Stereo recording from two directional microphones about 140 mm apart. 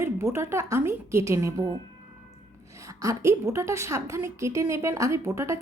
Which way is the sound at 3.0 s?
20° right (ahead or behind).